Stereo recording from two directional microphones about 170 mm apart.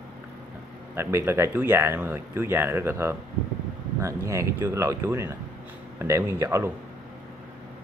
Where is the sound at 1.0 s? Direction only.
15° right (ahead or behind).